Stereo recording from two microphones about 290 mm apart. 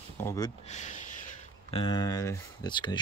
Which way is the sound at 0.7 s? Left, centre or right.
Left.